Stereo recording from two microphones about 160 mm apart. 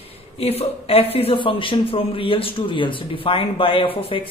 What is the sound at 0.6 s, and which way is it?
A man's voice, 35° left (ahead or behind).